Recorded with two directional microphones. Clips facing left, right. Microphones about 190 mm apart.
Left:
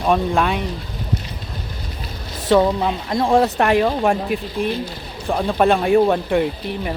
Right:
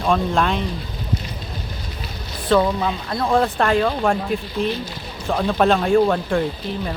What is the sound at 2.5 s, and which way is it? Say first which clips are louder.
Speech: left 2 dB; 15° left (ahead or behind).